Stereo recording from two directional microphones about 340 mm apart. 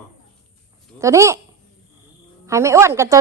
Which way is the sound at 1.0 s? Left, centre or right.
Centre.